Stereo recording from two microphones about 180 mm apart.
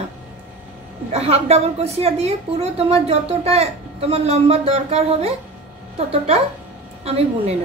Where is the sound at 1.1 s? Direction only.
35° right (ahead or behind).